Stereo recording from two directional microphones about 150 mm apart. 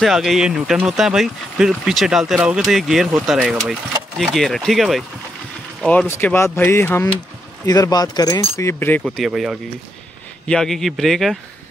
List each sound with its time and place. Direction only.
0.0 s speech: centre (ahead or behind)
9.0 s speech: centre (ahead or behind)